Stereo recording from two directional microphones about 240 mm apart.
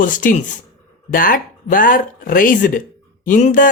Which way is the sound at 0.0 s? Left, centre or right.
Left.